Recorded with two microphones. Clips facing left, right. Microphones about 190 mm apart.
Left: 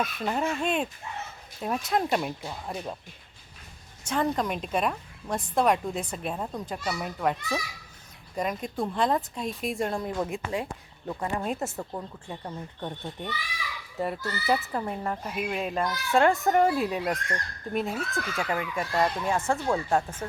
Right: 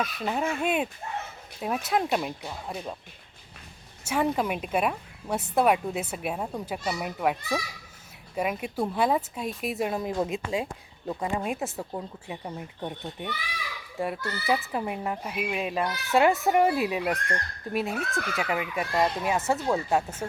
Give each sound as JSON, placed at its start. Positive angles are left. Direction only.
{"t": 0.0, "sound": "speech", "side_deg": 0}
{"t": 4.0, "sound": "speech", "side_deg": -10}
{"t": 10.2, "sound": "speech", "side_deg": -20}